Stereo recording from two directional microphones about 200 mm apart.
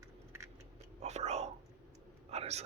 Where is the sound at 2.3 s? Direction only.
30° right (ahead or behind).